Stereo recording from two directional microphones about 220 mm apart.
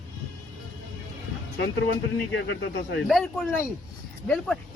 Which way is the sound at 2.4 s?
55° left (ahead or behind).